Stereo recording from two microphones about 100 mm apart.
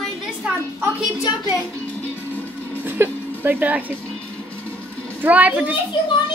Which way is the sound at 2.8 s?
20° right (ahead or behind).